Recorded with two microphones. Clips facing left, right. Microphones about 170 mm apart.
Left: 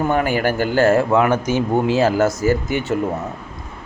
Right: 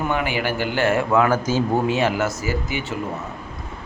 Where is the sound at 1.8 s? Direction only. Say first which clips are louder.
Left 5 dB; 35° left (ahead or behind); by 2.9 s 50° left (ahead or behind).